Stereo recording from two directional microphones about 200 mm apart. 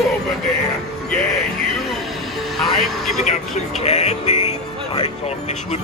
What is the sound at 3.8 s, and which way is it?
Music, 35° left (ahead or behind).